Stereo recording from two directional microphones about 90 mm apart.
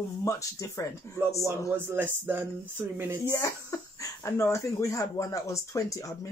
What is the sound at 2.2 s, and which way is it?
Speech, 20° right (ahead or behind).